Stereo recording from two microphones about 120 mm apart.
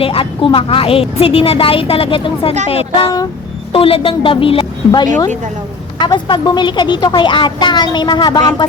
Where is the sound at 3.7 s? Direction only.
50° left (ahead or behind).